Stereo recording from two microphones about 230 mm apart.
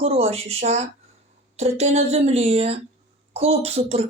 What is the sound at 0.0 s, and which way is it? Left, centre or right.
Speech, right.